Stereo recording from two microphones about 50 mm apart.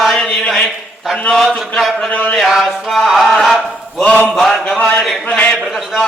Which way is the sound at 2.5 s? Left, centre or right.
Centre.